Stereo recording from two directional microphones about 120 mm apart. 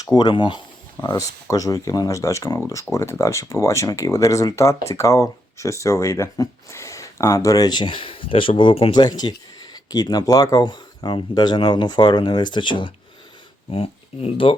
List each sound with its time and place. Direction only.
0.0 s speech: 35° left (ahead or behind)
1.0 s speech: 30° left (ahead or behind)
13.7 s speech: 55° left (ahead or behind)